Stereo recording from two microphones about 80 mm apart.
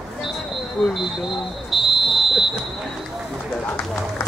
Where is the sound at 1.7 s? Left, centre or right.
Centre.